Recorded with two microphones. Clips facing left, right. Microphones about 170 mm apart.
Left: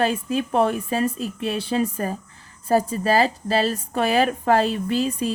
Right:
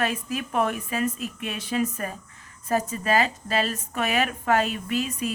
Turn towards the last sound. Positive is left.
turn(degrees=30)  # may be behind; listen again after turning